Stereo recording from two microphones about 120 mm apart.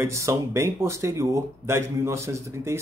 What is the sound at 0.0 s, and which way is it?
Speech, 25° right (ahead or behind).